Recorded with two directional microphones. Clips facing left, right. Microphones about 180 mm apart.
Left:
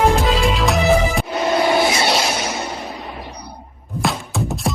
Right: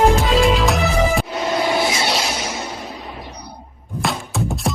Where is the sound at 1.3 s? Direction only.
60° left (ahead or behind).